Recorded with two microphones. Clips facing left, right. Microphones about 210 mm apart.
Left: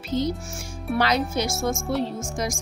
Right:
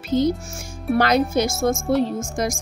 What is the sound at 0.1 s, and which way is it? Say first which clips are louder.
A woman's voice: right 6 dB; 50° right (ahead or behind).